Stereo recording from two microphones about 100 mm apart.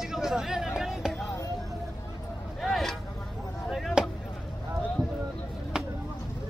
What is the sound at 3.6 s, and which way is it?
Chop, centre (ahead or behind).